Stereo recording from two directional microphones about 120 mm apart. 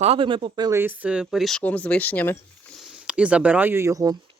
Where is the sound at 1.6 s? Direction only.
10° left (ahead or behind).